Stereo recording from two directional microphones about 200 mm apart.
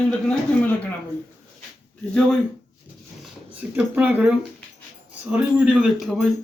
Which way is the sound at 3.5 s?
5° right (ahead or behind).